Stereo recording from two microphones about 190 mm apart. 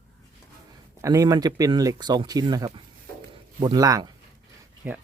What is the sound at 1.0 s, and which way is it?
Speech, 15° right (ahead or behind).